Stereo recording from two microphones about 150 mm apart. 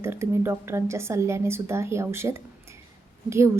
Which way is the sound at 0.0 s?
15° right (ahead or behind).